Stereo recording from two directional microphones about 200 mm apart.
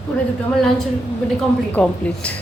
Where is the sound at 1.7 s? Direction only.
5° left (ahead or behind).